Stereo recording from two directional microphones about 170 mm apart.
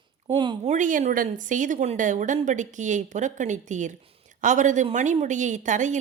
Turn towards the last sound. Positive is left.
turn(degrees=-45)  # may be behind; listen again after turning